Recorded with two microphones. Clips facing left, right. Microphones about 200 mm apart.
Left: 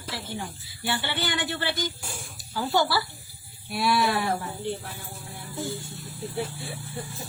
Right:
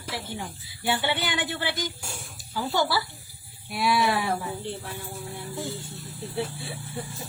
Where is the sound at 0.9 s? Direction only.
15° right (ahead or behind).